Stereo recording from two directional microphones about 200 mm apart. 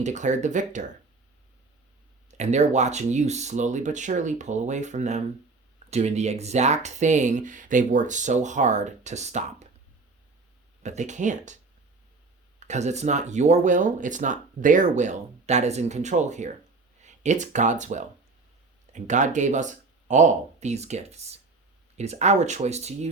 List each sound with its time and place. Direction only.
0.0 s speech: 35° right (ahead or behind)
2.4 s speech: 35° right (ahead or behind)
10.8 s speech: 35° right (ahead or behind)